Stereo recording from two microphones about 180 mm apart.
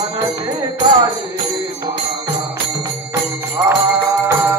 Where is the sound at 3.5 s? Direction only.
15° right (ahead or behind).